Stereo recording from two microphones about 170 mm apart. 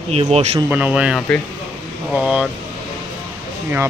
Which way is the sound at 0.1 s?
40° right (ahead or behind).